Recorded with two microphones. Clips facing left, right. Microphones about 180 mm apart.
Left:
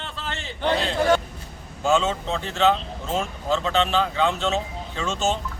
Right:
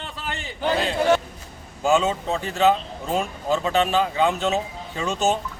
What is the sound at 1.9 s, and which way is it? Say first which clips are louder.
Speech: right 1 dB; 15° right (ahead or behind).